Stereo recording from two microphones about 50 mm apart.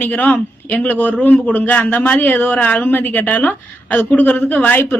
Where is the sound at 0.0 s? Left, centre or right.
Left.